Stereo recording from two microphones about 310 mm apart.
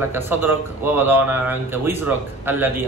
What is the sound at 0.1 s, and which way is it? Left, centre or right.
Speech, centre.